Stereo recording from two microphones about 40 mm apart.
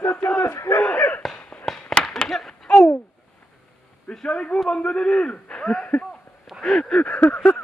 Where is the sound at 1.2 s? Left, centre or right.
Centre.